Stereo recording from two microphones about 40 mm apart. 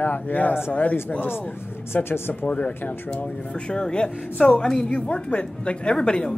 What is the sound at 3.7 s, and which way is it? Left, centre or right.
A woman's voice, left.